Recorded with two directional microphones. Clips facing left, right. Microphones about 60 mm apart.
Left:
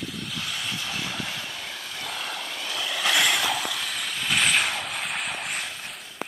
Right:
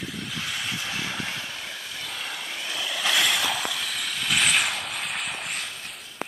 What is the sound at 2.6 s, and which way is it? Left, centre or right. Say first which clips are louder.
Vehicle: left 1 dB; centre.